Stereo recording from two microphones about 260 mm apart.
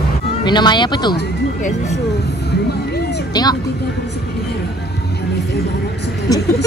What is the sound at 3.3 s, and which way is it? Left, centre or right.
Speech, centre.